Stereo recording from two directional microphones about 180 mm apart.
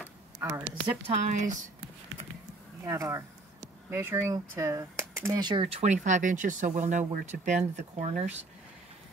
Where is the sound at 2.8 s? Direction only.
15° right (ahead or behind); by 8.3 s 40° right (ahead or behind).